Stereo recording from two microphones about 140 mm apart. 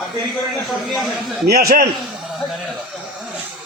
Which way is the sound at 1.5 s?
90° right.